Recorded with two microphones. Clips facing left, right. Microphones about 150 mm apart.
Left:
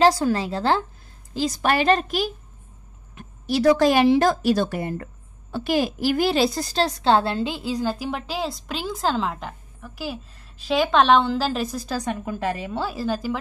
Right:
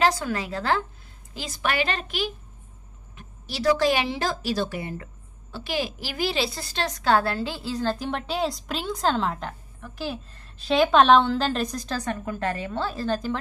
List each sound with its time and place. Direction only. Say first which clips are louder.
0.0 s a woman's voice: left 5 dB; 35° left (ahead or behind); by 13.4 s 10° left (ahead or behind)